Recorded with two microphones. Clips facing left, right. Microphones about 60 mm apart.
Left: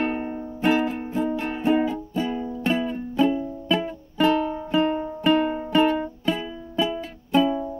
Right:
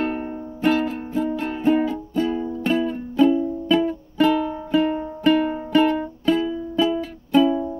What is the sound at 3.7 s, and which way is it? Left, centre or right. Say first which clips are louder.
Music: right 6 dB; centre.